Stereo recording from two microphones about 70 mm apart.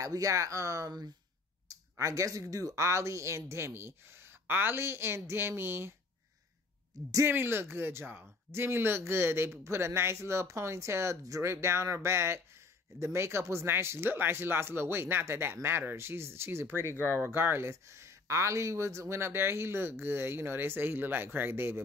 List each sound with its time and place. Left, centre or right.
0.0 s speech: right
2.8 s speech: right
7.2 s speech: right
16.8 s speech: left
17.2 s speech: right